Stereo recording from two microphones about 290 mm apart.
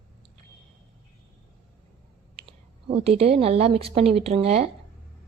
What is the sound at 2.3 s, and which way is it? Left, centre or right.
A woman's voice, centre.